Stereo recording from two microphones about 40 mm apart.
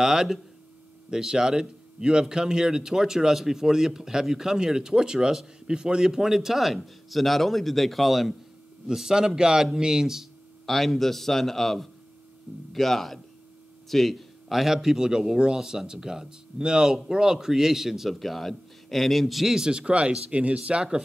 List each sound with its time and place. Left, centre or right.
0.0 s speech: centre
8.8 s speech: centre
10.7 s a man's voice: centre
19.4 s speech: centre
19.7 s speech: right